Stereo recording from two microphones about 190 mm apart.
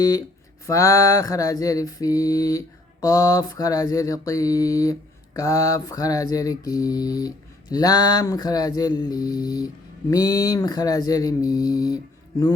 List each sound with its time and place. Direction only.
0.0 s mantra: 20° left (ahead or behind)